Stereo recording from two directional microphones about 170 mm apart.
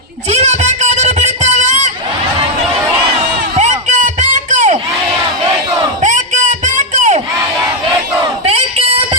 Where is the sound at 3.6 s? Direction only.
45° right (ahead or behind).